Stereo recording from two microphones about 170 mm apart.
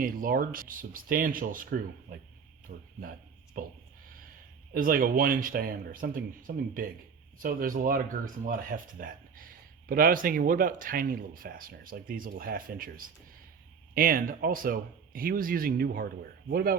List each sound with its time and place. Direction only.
0.0 s speech: 60° right (ahead or behind)
13.9 s speech: 60° right (ahead or behind)